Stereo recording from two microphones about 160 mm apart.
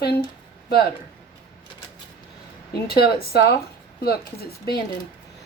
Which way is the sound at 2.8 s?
75° left (ahead or behind).